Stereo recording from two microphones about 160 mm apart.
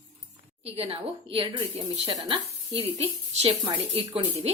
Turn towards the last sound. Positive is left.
turn(degrees=-40)  # may be behind; listen again after turning